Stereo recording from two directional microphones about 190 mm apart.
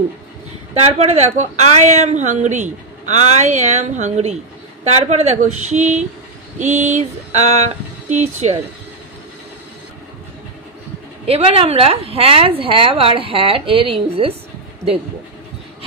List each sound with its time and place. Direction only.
0.7 s speech: 35° right (ahead or behind)
11.2 s a woman's voice: 30° right (ahead or behind)